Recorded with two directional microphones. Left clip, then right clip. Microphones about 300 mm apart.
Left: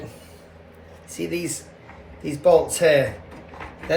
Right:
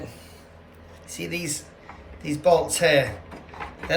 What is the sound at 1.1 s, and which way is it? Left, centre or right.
Speech, centre.